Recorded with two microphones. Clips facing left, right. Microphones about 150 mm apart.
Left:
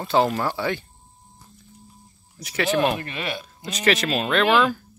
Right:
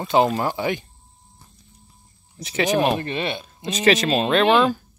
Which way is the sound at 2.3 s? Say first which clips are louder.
Right 2 dB; 25° right (ahead or behind).